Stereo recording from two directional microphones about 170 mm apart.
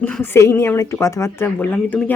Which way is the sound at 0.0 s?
10° left (ahead or behind).